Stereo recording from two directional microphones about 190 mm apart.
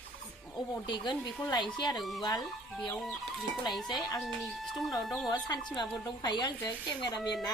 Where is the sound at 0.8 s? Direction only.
25° left (ahead or behind).